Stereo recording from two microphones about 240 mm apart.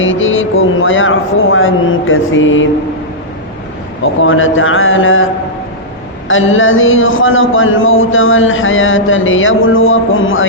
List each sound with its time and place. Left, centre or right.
0.0 s a sound: left
4.0 s a man's voice: left
6.2 s a man's voice: left